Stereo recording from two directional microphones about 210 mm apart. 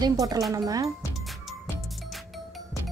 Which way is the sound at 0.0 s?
20° right (ahead or behind).